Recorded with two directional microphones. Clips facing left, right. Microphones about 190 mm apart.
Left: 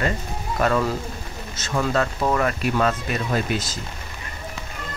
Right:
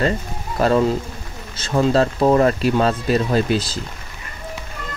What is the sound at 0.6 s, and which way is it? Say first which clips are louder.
Speech: right 5 dB; 30° right (ahead or behind).